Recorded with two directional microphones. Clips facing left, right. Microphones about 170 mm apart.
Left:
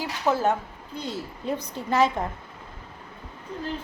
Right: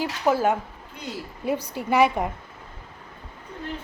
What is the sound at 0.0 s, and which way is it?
A woman's voice, 10° right (ahead or behind).